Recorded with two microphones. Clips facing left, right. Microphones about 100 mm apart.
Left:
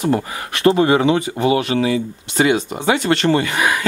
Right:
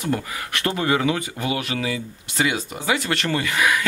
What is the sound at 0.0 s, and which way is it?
Speech, 25° left (ahead or behind).